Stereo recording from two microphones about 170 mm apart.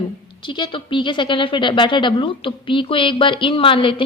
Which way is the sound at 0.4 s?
30° left (ahead or behind).